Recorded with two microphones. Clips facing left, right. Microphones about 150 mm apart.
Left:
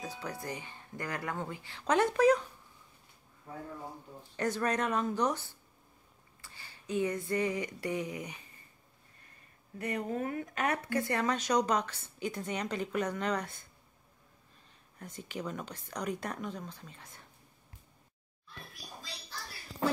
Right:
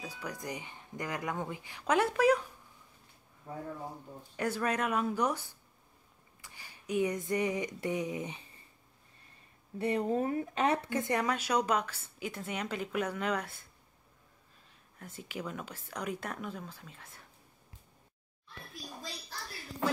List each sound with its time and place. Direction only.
0.0 s speech: 10° right (ahead or behind)
4.4 s speech: 5° right (ahead or behind)
6.4 s a sound: 15° right (ahead or behind)
9.8 s speech: 30° right (ahead or behind); by 13.6 s 5° right (ahead or behind)
15.0 s speech: 5° right (ahead or behind)